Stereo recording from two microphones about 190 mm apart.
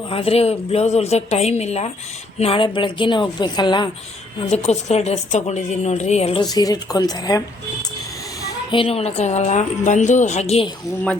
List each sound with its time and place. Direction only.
0.1 s a woman's voice: 30° left (ahead or behind)
4.4 s a woman's voice: 35° left (ahead or behind)
6.4 s a woman's voice: 20° left (ahead or behind)
8.7 s a woman's voice: 30° left (ahead or behind)